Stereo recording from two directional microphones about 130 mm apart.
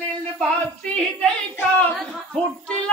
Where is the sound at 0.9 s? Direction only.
10° left (ahead or behind).